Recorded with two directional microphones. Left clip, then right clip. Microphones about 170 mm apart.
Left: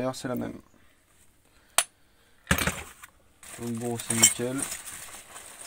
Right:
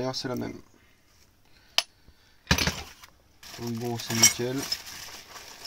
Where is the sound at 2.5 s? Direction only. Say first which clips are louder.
Right 1 dB; 25° right (ahead or behind).